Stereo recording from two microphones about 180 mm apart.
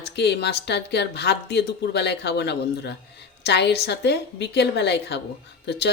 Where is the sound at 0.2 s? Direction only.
65° left (ahead or behind).